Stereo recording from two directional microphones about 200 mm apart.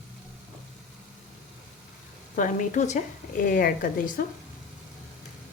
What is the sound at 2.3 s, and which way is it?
A woman's voice, 40° left (ahead or behind).